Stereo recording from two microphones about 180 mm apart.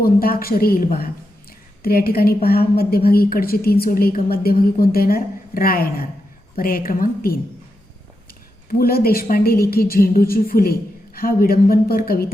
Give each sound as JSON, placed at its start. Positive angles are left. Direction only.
{"t": 0.0, "sound": "a woman's voice", "side_deg": 55}
{"t": 8.8, "sound": "a woman's voice", "side_deg": 60}